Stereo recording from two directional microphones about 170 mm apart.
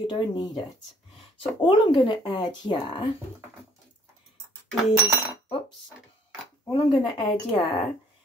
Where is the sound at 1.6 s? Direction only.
25° left (ahead or behind).